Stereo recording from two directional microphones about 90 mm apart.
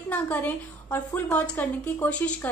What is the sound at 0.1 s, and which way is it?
A woman's voice, 20° left (ahead or behind).